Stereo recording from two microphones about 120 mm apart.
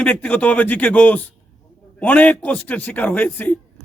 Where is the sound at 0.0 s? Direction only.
10° left (ahead or behind).